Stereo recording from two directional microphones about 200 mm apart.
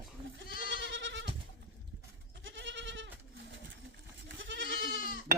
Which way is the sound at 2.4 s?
65° right (ahead or behind).